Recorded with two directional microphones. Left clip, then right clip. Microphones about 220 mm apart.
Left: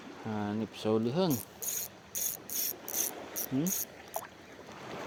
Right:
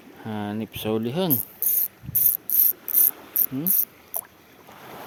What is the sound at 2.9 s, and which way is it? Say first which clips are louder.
Cricket: right 3 dB; 45° right (ahead or behind).